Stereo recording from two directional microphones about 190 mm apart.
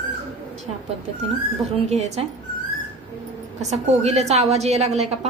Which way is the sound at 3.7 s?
35° right (ahead or behind).